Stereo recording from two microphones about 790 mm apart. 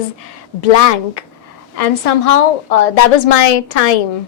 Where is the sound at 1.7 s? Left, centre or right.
Left.